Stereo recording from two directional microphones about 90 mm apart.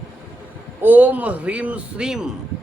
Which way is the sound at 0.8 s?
20° right (ahead or behind).